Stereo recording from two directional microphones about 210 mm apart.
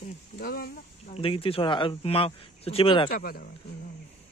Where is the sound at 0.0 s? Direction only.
45° left (ahead or behind).